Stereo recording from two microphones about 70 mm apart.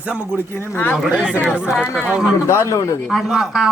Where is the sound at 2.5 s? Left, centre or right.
Left.